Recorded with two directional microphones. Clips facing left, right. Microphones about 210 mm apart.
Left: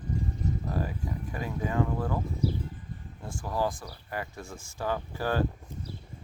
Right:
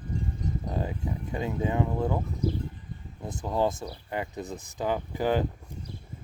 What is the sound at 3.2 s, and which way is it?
Speech, 20° right (ahead or behind).